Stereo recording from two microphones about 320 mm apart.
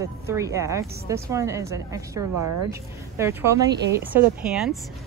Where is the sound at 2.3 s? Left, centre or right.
Right.